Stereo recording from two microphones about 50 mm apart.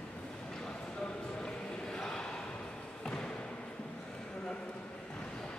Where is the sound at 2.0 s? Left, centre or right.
Centre.